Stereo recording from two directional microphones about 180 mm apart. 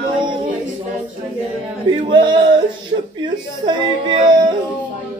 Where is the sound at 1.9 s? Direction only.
25° right (ahead or behind).